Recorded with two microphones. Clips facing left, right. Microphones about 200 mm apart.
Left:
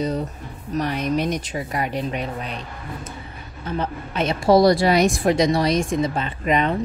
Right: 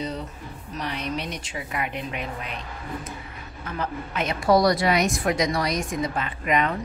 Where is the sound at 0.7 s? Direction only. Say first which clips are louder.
Left 8 dB; 45° left (ahead or behind).